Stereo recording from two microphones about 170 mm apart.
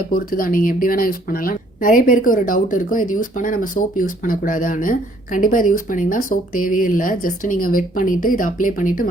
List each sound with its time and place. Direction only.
0.1 s a woman's voice: 55° left (ahead or behind)